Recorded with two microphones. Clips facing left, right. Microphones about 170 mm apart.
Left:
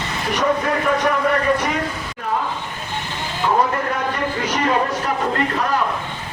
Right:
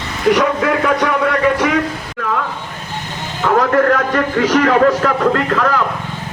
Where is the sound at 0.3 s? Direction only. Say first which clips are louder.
Right 6 dB; 90° right.